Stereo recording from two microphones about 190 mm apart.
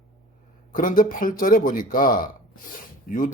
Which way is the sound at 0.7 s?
45° left (ahead or behind).